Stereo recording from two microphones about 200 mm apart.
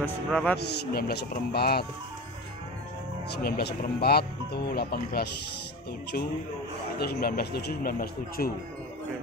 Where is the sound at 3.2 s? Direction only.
50° left (ahead or behind).